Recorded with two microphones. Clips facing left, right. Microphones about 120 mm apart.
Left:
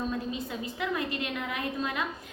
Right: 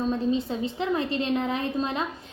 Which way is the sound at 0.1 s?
30° right (ahead or behind).